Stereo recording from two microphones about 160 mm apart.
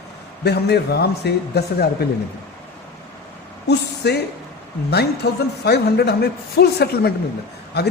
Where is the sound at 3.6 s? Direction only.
90° left.